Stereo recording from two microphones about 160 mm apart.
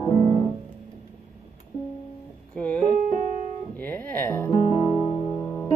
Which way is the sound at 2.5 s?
10° left (ahead or behind).